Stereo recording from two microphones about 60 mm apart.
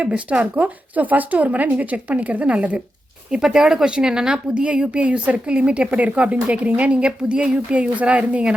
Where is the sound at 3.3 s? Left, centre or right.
Centre.